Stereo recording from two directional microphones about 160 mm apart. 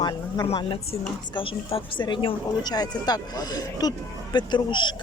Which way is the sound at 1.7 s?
30° left (ahead or behind).